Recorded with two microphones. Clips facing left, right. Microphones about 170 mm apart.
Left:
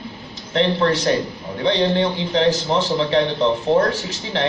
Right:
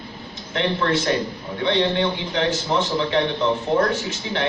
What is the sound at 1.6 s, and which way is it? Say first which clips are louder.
A man's voice: left 2 dB; 35° left (ahead or behind).